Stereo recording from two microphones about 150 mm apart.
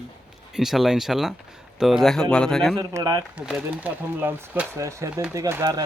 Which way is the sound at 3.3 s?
5° right (ahead or behind).